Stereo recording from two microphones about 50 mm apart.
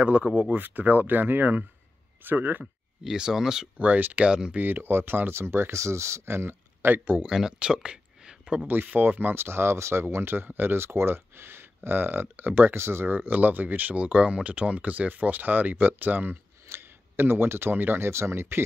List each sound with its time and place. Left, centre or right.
0.0 s speech: right
3.0 s speech: centre
3.7 s speech: right
4.3 s speech: centre
4.6 s speech: right
5.3 s speech: right
7.2 s speech: centre
8.8 s speech: right
9.4 s speech: right
10.1 s speech: right
12.7 s speech: right
13.1 s speech: right
14.0 s speech: right
16.6 s speech: right